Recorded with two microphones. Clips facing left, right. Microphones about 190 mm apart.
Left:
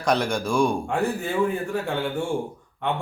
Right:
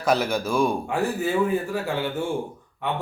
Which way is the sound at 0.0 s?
5° right (ahead or behind).